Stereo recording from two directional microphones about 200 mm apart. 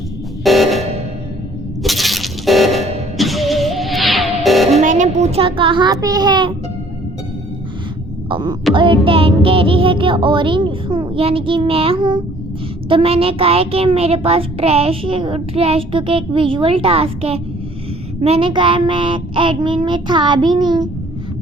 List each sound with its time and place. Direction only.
0.4 s music: centre (ahead or behind)
1.8 s music: centre (ahead or behind)
4.7 s a child's voice: 40° right (ahead or behind); by 6.5 s 20° right (ahead or behind)
8.3 s a child's voice: 20° right (ahead or behind)